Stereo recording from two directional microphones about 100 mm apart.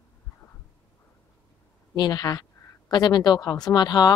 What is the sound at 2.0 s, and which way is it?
A woman's voice, 40° left (ahead or behind).